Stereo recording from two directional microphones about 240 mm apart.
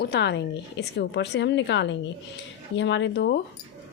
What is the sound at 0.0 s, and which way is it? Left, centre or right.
A woman's voice, left.